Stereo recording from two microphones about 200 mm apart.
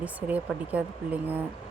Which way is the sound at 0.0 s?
10° right (ahead or behind).